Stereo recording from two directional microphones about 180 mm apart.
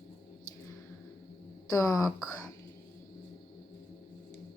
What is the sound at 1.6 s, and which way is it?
Speech, 20° left (ahead or behind).